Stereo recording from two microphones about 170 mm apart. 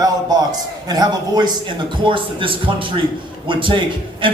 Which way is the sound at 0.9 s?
25° right (ahead or behind).